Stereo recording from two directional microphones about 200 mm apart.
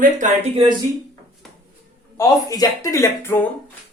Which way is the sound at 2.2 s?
15° left (ahead or behind).